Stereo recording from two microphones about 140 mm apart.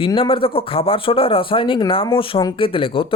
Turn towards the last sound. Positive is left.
turn(degrees=40)  # may be behind; listen again after turning